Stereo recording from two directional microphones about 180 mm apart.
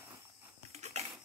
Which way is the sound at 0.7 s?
40° right (ahead or behind).